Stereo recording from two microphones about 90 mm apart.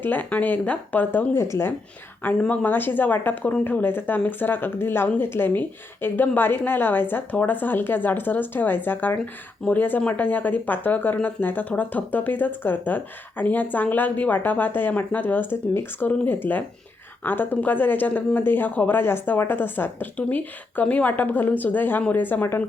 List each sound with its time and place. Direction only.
0.0 s speech: 20° left (ahead or behind)
2.4 s speech: 10° left (ahead or behind)
2.6 s speech: 20° left (ahead or behind)